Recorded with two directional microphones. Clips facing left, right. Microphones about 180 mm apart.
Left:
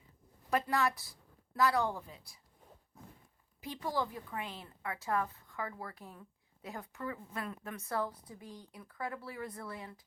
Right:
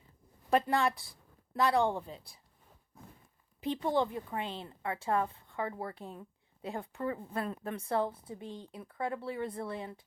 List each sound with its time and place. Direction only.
0.5 s speech: 25° right (ahead or behind)
3.6 s speech: 25° right (ahead or behind)